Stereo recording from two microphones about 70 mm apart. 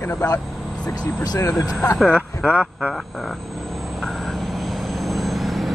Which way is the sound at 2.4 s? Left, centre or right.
Centre.